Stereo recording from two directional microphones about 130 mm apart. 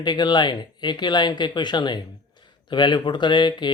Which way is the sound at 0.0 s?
35° left (ahead or behind).